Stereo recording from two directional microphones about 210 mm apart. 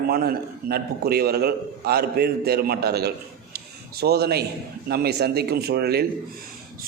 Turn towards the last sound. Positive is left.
turn(degrees=-50)  # may be behind; listen again after turning